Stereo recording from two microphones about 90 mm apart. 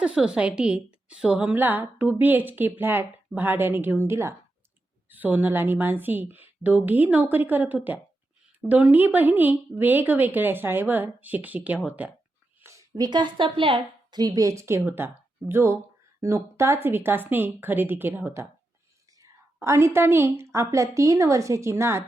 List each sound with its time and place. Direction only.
0.0 s a woman's voice: 10° right (ahead or behind); by 4.4 s 30° right (ahead or behind)
5.0 s a woman's voice: 20° right (ahead or behind)
12.6 s speech: 40° right (ahead or behind); by 13.8 s 80° right
14.1 s a woman's voice: 50° right (ahead or behind); by 18.3 s 20° right (ahead or behind)
19.2 s a woman's voice: 35° right (ahead or behind)